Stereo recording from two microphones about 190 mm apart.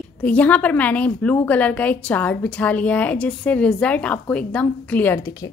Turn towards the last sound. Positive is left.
turn(degrees=20)  # may be behind; listen again after turning